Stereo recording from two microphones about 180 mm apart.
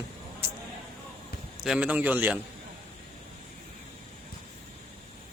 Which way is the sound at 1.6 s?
5° right (ahead or behind).